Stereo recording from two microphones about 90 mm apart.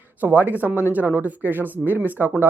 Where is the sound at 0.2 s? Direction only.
20° right (ahead or behind).